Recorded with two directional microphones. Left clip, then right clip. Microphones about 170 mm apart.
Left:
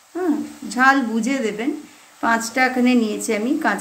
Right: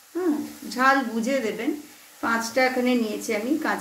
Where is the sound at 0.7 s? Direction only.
65° left (ahead or behind).